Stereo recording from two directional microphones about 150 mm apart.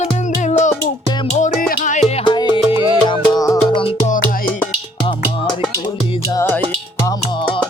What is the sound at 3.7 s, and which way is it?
Music, 35° left (ahead or behind).